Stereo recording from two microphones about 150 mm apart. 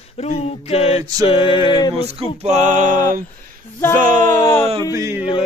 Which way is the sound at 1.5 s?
30° right (ahead or behind).